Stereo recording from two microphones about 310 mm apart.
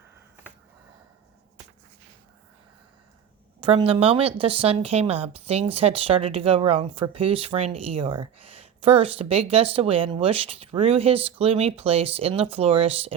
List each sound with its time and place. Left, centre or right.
3.6 s speech: centre